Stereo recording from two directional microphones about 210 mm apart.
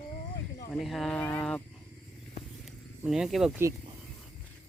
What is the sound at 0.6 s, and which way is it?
Speech, centre (ahead or behind).